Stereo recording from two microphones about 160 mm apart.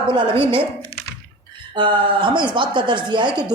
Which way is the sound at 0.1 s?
35° right (ahead or behind).